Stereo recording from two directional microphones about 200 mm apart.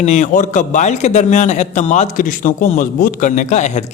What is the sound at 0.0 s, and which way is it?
A man's voice, 35° left (ahead or behind).